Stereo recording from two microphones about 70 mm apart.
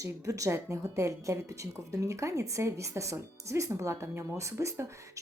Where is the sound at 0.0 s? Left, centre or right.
Right.